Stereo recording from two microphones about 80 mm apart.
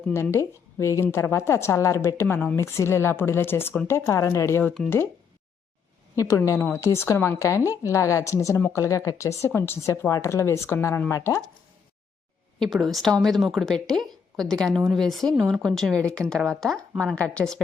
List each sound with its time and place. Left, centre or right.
0.1 s speech: left
2.2 s speech: centre
2.6 s speech: left
6.1 s speech: left
12.5 s a woman's voice: centre